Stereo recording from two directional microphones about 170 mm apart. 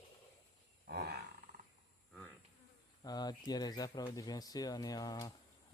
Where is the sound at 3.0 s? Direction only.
25° left (ahead or behind).